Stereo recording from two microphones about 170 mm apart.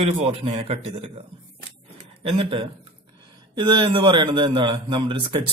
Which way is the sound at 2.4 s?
30° right (ahead or behind).